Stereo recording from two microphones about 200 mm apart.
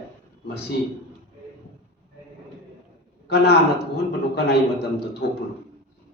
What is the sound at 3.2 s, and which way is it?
A man's voice, 55° left (ahead or behind).